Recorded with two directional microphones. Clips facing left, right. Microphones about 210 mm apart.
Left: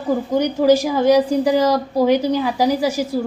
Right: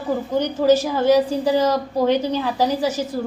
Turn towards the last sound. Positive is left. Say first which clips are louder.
# left 3 dB
turn(degrees=10)  # may be behind; listen again after turning